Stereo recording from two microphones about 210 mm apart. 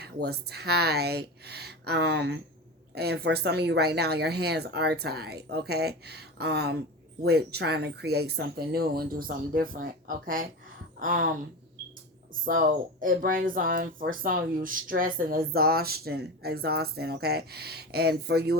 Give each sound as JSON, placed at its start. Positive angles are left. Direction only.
{"t": 0.0, "sound": "speech", "side_deg": -50}
{"t": 12.5, "sound": "speech", "side_deg": -40}